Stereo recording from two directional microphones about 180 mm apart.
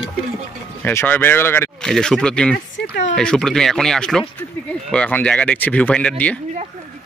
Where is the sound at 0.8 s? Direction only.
10° left (ahead or behind).